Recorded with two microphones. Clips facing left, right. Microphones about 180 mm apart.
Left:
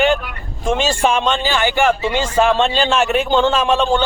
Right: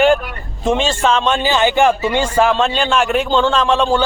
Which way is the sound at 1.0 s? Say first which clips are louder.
Right 1 dB; 15° left (ahead or behind).